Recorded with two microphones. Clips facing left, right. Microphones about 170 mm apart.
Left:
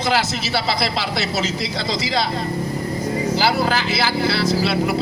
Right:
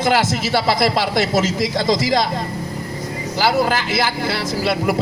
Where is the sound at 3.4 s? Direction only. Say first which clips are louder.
Right 5 dB; 50° right (ahead or behind).